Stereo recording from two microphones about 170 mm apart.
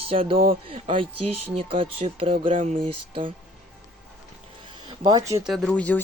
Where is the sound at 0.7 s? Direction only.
35° right (ahead or behind).